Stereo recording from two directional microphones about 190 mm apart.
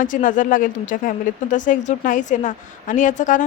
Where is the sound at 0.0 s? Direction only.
45° left (ahead or behind).